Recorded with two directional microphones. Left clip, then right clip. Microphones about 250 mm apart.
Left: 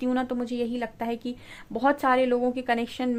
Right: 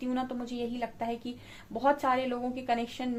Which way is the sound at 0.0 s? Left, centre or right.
Left.